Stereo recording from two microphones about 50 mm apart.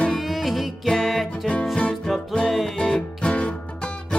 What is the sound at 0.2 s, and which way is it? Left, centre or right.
Music, centre.